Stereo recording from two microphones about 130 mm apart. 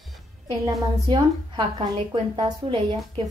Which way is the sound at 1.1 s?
40° right (ahead or behind).